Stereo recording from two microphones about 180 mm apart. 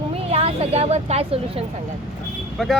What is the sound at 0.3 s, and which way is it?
Speech, 35° right (ahead or behind).